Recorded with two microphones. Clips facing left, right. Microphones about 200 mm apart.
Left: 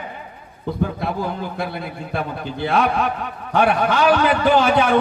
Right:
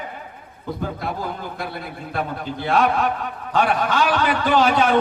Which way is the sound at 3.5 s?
55° left (ahead or behind).